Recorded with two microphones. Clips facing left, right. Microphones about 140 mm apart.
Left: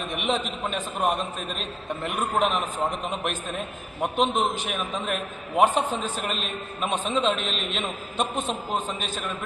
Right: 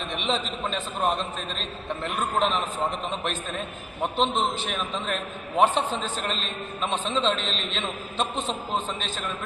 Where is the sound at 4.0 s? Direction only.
10° left (ahead or behind).